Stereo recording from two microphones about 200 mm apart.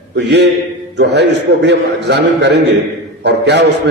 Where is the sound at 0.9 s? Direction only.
60° right (ahead or behind).